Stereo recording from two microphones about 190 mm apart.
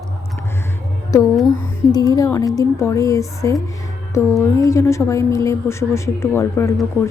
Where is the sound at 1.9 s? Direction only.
20° left (ahead or behind).